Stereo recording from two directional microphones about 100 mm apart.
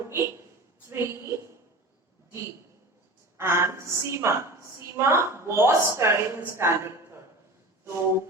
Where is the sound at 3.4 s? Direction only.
25° right (ahead or behind).